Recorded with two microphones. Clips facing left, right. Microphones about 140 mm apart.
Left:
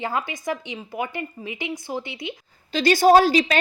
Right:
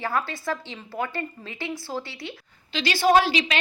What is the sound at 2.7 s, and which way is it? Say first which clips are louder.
Speech: left 5 dB; 45° left (ahead or behind).